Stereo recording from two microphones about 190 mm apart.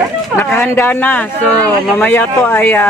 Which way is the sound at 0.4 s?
10° left (ahead or behind).